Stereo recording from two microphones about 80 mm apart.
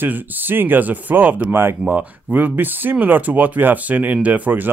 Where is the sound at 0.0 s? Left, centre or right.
Right.